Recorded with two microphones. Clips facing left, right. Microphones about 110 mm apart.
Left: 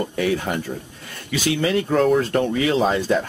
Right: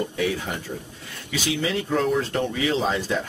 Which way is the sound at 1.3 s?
55° left (ahead or behind).